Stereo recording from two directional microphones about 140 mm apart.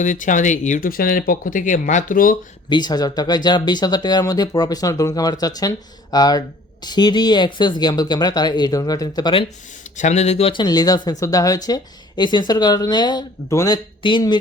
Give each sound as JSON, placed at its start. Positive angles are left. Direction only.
{"t": 0.0, "sound": "speech", "side_deg": 65}
{"t": 2.6, "sound": "speech", "side_deg": 30}
{"t": 10.0, "sound": "speech", "side_deg": 55}
{"t": 10.5, "sound": "speech", "side_deg": 30}
{"t": 14.0, "sound": "speech", "side_deg": 35}